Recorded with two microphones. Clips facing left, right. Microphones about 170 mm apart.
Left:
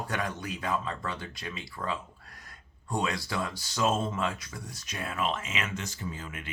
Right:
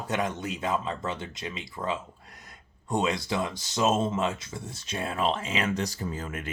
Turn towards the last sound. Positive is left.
turn(degrees=-45)  # may be behind; listen again after turning